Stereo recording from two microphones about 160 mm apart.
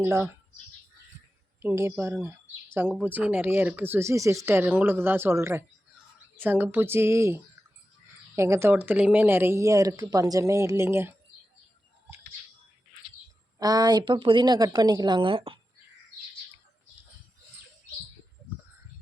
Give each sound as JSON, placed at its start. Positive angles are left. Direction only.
{"t": 0.0, "sound": "speech", "side_deg": -15}
{"t": 1.6, "sound": "speech", "side_deg": -15}
{"t": 13.6, "sound": "a woman's voice", "side_deg": -25}